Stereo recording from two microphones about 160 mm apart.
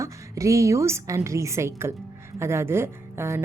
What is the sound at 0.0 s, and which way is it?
A woman's voice, 20° right (ahead or behind).